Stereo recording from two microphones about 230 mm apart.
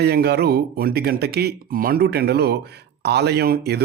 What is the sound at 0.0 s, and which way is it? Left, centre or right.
Speech, right.